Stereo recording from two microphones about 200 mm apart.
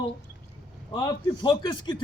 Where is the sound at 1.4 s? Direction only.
20° left (ahead or behind).